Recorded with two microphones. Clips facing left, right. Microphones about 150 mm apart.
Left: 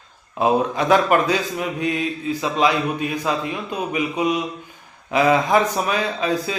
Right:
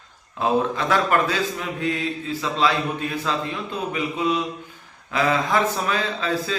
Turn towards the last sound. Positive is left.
turn(degrees=15)  # may be behind; listen again after turning